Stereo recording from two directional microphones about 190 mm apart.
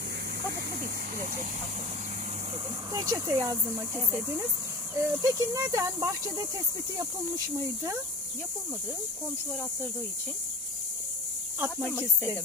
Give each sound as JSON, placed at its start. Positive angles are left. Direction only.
{"t": 2.9, "sound": "speech", "side_deg": -15}